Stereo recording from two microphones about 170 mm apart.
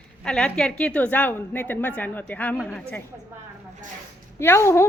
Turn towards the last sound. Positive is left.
turn(degrees=15)  # may be behind; listen again after turning